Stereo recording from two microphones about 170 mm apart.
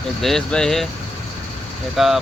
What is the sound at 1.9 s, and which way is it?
Speech, centre (ahead or behind).